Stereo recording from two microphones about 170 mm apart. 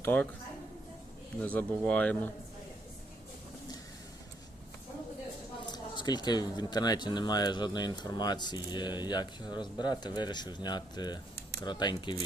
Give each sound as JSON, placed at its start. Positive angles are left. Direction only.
{"t": 0.0, "sound": "a woman's voice", "side_deg": 10}
{"t": 1.4, "sound": "speech", "side_deg": 10}
{"t": 5.6, "sound": "speech", "side_deg": 25}